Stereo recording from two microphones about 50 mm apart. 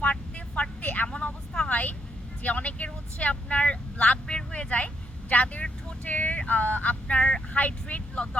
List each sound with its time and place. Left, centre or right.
0.0 s vehicle: left
1.0 s vehicle: centre
5.3 s speech: left
6.1 s vehicle: left
7.6 s speech: left